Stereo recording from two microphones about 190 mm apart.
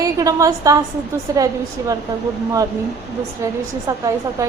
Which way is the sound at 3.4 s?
15° right (ahead or behind).